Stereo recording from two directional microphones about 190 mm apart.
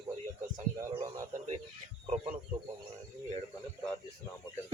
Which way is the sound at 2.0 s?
35° right (ahead or behind).